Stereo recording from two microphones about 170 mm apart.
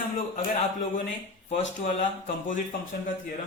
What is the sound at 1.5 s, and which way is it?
Speech, 40° left (ahead or behind).